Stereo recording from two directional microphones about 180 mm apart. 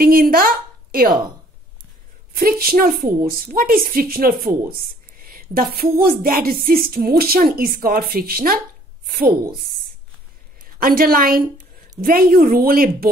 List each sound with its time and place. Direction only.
0.0 s a woman's voice: 55° right (ahead or behind)
2.3 s a woman's voice: 55° right (ahead or behind)
10.6 s a woman's voice: 55° right (ahead or behind)